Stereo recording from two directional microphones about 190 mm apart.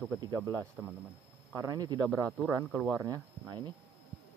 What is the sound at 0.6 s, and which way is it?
Speech, 5° right (ahead or behind).